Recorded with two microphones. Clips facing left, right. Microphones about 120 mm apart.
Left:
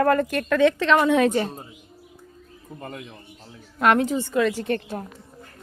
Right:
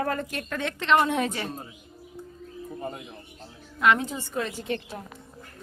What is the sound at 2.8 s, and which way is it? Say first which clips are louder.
Speech: even; 90° left.